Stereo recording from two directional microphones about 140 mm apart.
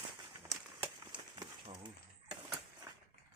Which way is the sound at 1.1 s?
35° right (ahead or behind).